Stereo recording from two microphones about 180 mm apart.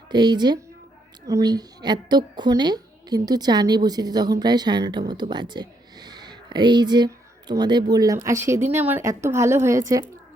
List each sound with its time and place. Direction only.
0.1 s a woman's voice: 25° right (ahead or behind)